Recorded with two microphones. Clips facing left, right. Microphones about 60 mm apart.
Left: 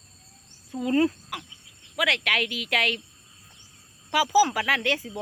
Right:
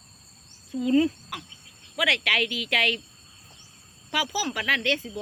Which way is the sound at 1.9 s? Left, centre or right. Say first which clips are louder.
Even; centre.